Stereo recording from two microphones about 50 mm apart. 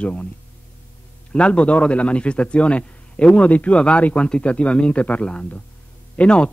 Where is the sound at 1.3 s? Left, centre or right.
Left.